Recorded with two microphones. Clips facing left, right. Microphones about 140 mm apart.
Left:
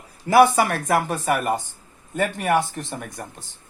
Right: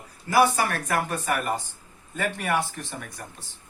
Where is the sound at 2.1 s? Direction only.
45° left (ahead or behind).